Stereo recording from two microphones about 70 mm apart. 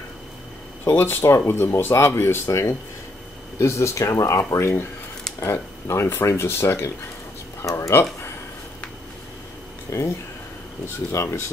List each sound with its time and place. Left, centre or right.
0.8 s speech: left
7.6 s speech: left
7.9 s speech: left
9.8 s speech: left